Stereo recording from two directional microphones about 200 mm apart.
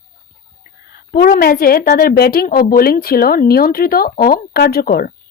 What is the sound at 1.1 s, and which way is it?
Speech, 45° left (ahead or behind).